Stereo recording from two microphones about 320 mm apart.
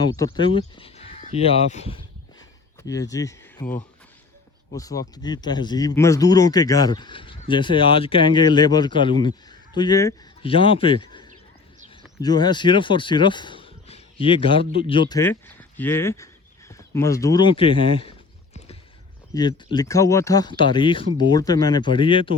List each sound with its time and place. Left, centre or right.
0.3 s speech: centre
19.3 s speech: centre